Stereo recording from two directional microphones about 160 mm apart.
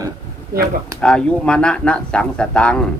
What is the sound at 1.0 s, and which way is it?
Speech, 5° left (ahead or behind).